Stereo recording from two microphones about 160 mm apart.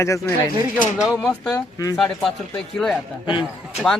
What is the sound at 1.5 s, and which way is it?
Speech, 20° left (ahead or behind).